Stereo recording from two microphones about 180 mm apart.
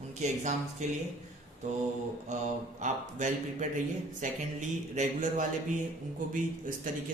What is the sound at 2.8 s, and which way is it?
Speech, 45° right (ahead or behind).